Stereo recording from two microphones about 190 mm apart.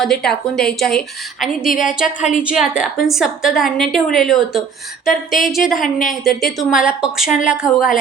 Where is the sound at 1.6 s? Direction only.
45° left (ahead or behind).